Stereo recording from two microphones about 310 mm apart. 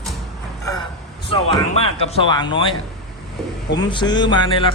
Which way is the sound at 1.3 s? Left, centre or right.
Centre.